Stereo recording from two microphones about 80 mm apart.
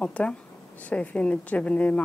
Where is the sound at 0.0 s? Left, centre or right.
Centre.